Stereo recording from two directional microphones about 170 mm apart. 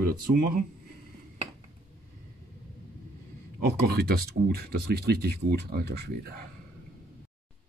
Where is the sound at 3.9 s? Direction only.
65° right (ahead or behind).